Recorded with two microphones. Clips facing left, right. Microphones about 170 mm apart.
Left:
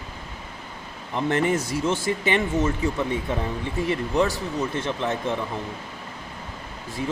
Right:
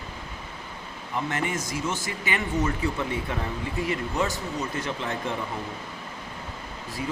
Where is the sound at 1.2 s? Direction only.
35° left (ahead or behind).